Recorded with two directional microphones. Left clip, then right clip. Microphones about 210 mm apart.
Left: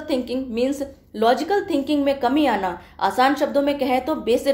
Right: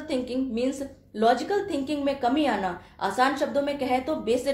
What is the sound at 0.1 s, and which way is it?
A woman's voice, 40° left (ahead or behind).